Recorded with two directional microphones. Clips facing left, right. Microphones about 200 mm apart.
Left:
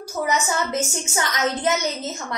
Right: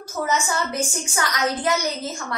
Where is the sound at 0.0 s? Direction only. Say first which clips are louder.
Left 1 dB; 15° left (ahead or behind).